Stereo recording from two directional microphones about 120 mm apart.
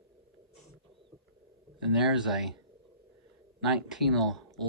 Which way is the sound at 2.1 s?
5° right (ahead or behind).